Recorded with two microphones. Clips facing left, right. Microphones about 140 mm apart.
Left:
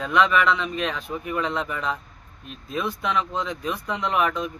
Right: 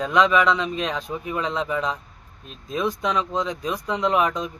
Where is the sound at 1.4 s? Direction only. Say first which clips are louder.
Right 4 dB; 15° right (ahead or behind).